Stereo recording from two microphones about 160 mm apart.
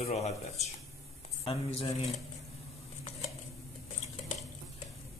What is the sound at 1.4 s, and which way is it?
Speech, 40° left (ahead or behind).